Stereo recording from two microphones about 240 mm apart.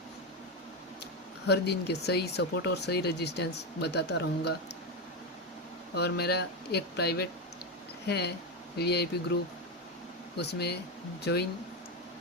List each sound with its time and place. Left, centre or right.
1.5 s speech: left
5.9 s speech: left